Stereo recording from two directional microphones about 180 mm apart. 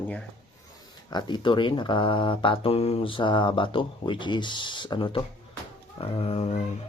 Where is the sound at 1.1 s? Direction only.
25° left (ahead or behind).